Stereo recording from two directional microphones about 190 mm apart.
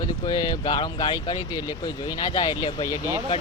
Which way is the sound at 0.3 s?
20° left (ahead or behind).